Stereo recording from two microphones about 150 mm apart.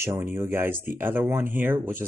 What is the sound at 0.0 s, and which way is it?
Speech, 15° right (ahead or behind).